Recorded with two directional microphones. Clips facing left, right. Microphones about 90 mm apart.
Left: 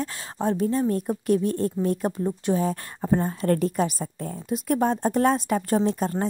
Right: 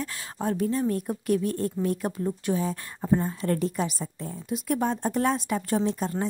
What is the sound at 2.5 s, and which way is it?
Speech, 50° left (ahead or behind).